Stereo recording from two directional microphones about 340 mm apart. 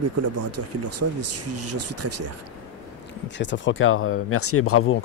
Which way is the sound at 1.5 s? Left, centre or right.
Right.